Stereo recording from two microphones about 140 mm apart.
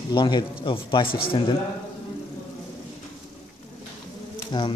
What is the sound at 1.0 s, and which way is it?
Speech, 90° left.